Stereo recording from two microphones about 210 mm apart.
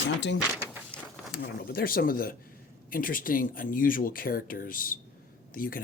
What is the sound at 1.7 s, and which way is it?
Speech, 45° left (ahead or behind).